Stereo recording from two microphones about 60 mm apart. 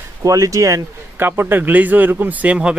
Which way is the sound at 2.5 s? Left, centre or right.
Centre.